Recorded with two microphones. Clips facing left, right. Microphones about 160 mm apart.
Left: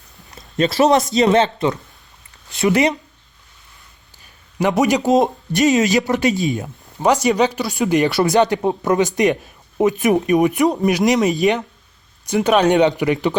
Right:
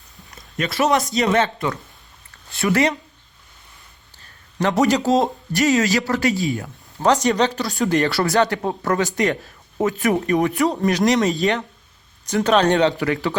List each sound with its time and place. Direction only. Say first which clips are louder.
0.5 s a man's voice: left 5 dB; 30° left (ahead or behind)
4.2 s speech: left 2 dB; 10° left (ahead or behind)